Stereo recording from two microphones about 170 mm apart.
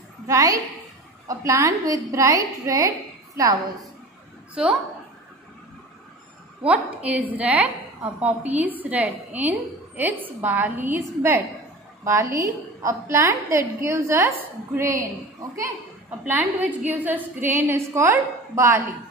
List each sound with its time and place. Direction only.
0.3 s a woman's voice: 20° right (ahead or behind)
4.6 s a woman's voice: 5° right (ahead or behind)
6.6 s a woman's voice: 10° right (ahead or behind)
16.3 s a woman's voice: 10° right (ahead or behind)